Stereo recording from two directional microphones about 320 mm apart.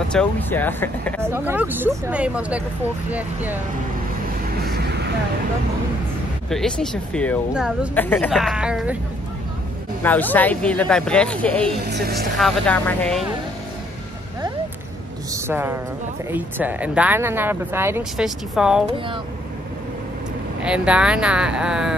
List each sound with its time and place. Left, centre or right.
0.1 s speech: centre
4.6 s vehicle: right
6.5 s speech: centre
10.0 s speech: centre
11.8 s speech: right
12.4 s speech: centre
15.3 s a woman's voice: centre
20.6 s speech: centre